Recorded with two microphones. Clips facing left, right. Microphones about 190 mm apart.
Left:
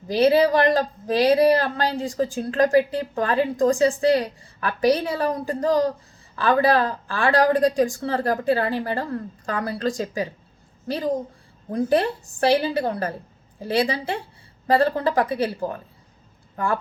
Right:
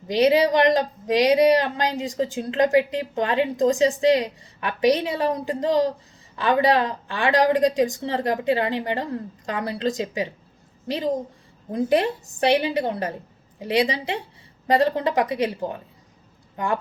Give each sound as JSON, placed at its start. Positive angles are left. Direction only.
{"t": 0.1, "sound": "a woman's voice", "side_deg": -20}